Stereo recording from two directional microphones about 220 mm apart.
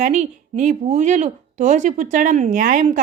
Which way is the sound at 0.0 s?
30° right (ahead or behind).